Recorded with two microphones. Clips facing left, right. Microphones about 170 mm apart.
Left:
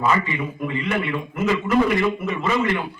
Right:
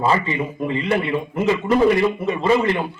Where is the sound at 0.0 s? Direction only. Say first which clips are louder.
Right 2 dB; 30° right (ahead or behind).